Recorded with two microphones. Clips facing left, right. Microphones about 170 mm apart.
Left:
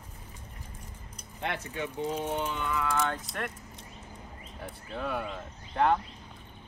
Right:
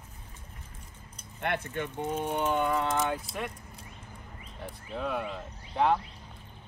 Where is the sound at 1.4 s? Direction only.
55° right (ahead or behind).